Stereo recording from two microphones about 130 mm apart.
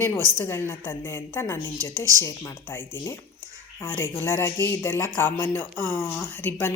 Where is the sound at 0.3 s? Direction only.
20° left (ahead or behind).